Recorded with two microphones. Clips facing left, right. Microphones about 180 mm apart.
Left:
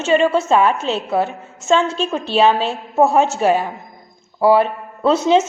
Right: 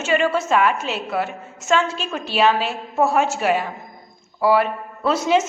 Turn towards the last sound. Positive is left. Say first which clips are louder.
# left 4 dB
turn(degrees=30)  # may be behind; listen again after turning